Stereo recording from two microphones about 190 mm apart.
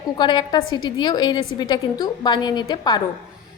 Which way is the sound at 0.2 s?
25° left (ahead or behind).